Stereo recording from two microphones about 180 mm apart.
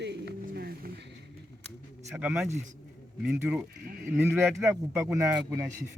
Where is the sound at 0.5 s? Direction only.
60° right (ahead or behind).